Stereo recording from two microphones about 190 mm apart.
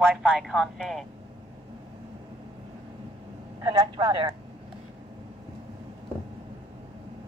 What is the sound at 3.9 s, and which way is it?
Speech, 25° right (ahead or behind).